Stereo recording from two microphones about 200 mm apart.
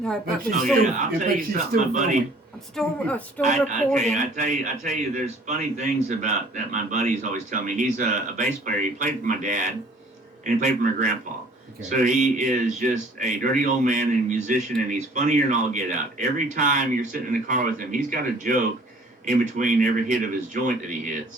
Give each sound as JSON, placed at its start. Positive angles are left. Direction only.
{"t": 0.8, "sound": "speech", "side_deg": -40}
{"t": 2.7, "sound": "speech", "side_deg": 5}
{"t": 3.4, "sound": "speech", "side_deg": -35}